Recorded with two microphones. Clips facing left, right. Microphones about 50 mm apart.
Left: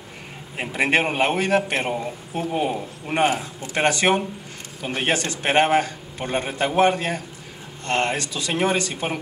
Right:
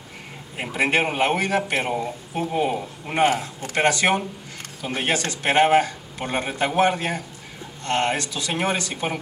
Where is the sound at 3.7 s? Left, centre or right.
Left.